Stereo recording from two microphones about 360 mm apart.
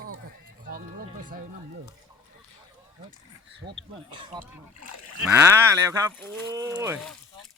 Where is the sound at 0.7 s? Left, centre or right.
Right.